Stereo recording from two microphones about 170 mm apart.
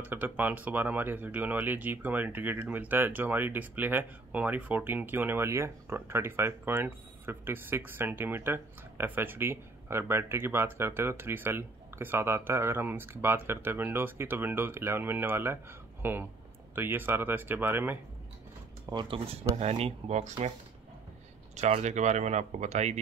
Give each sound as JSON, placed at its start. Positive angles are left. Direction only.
{"t": 0.0, "sound": "speech", "side_deg": -10}
{"t": 18.9, "sound": "speech", "side_deg": -30}
{"t": 21.5, "sound": "speech", "side_deg": -40}